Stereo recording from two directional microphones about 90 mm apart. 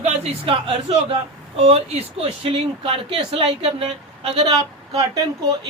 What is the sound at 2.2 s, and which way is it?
A woman's voice, 90° right.